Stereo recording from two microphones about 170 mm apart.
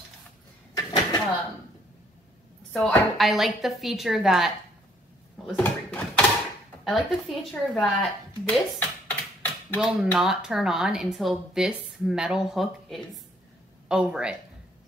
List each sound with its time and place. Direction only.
0.7 s a sound: 25° left (ahead or behind)
2.7 s speech: centre (ahead or behind)
5.6 s speech: 10° left (ahead or behind)
6.8 s a woman's voice: centre (ahead or behind)
9.8 s speech: 5° right (ahead or behind)